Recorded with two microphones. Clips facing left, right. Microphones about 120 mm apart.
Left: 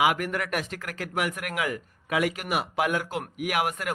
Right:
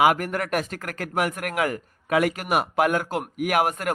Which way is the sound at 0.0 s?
45° right (ahead or behind).